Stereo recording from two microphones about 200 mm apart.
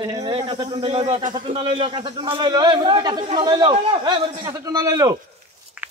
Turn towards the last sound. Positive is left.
turn(degrees=-5)  # may be behind; listen again after turning